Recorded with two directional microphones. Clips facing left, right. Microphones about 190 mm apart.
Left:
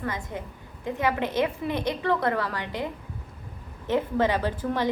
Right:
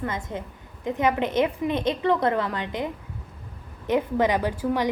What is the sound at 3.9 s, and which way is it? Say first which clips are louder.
A woman's voice: right 2 dB; 15° right (ahead or behind).